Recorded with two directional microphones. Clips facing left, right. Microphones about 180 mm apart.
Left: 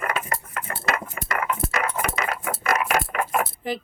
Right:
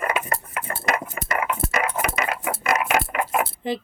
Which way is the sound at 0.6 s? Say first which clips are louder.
Right 2 dB; 35° right (ahead or behind).